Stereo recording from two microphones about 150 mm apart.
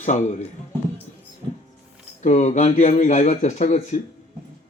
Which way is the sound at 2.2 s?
50° left (ahead or behind).